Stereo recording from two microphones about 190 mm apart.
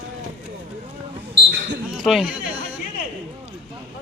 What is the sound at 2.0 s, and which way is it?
Speech, 5° right (ahead or behind).